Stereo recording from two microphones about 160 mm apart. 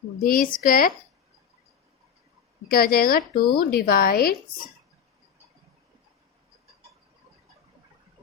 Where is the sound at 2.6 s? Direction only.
70° left (ahead or behind).